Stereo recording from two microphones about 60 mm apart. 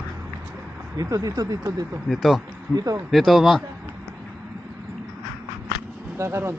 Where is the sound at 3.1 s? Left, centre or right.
Centre.